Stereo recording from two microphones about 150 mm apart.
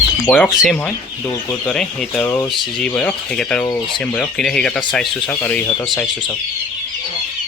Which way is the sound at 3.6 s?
25° left (ahead or behind).